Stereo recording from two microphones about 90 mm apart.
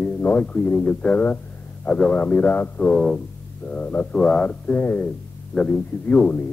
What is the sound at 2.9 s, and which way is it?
Speech, 5° left (ahead or behind).